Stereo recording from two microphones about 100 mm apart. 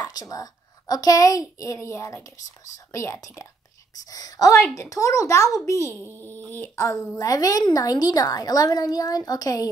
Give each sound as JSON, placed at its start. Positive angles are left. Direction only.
{"t": 0.0, "sound": "a woman's voice", "side_deg": 40}
{"t": 3.9, "sound": "a woman's voice", "side_deg": 40}